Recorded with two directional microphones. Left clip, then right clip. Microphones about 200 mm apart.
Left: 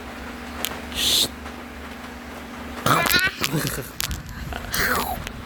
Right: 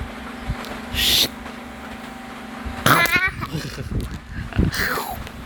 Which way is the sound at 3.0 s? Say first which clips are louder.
Right 2 dB; 30° right (ahead or behind).